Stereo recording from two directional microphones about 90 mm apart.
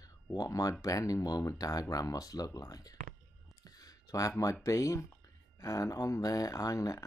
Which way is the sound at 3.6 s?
45° left (ahead or behind).